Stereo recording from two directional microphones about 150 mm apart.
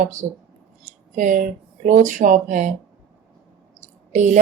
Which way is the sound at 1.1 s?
60° right (ahead or behind).